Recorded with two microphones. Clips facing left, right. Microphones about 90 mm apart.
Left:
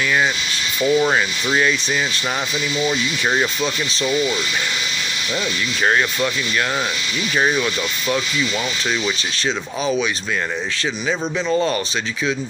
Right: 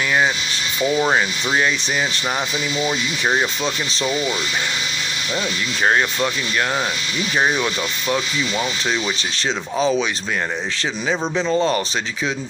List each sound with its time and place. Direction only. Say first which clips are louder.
0.9 s speech: even; 20° right (ahead or behind)
2.8 s speech: left 1 dB; 15° right (ahead or behind)
7.3 s speech: even; 20° right (ahead or behind)
11.5 s speech: even; 30° right (ahead or behind)